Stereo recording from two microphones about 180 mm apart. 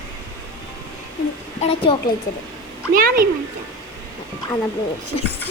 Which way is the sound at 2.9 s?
55° right (ahead or behind).